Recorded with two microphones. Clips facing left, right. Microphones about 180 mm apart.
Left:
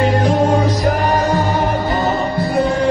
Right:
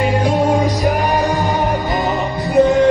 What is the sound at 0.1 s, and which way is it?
Music, 15° right (ahead or behind).